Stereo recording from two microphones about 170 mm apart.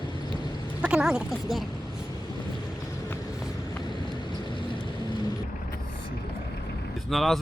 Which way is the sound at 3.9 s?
25° left (ahead or behind).